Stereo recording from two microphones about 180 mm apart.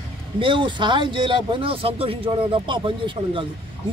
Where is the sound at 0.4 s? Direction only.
30° right (ahead or behind).